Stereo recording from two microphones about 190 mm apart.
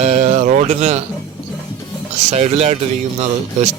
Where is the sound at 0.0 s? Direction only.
35° right (ahead or behind).